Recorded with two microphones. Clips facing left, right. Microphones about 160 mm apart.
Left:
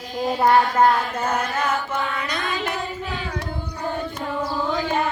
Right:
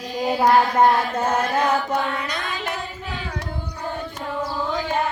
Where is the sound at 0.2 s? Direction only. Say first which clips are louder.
Right 1 dB; 5° right (ahead or behind).